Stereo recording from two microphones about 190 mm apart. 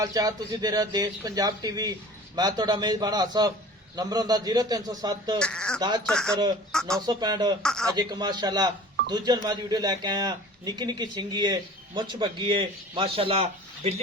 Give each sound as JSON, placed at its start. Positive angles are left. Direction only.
{"t": 0.0, "sound": "a man's voice", "side_deg": -20}
{"t": 5.4, "sound": "speech", "side_deg": 5}
{"t": 5.8, "sound": "a man's voice", "side_deg": -20}
{"t": 6.1, "sound": "speech", "side_deg": 5}
{"t": 7.0, "sound": "a man's voice", "side_deg": -20}
{"t": 7.6, "sound": "speech", "side_deg": 5}
{"t": 7.9, "sound": "a man's voice", "side_deg": -20}